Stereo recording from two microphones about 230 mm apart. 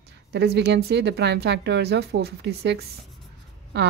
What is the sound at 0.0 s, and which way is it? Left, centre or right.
A woman's voice, right.